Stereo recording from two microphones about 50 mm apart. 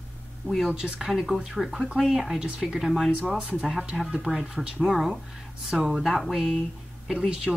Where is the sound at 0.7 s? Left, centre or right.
Centre.